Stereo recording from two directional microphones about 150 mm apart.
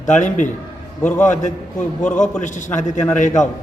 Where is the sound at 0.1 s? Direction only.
55° left (ahead or behind).